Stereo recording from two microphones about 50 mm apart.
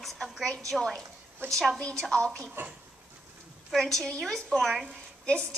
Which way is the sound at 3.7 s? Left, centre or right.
Centre.